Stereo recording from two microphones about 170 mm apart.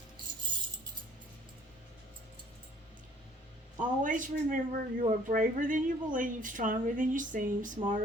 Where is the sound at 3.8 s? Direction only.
50° right (ahead or behind).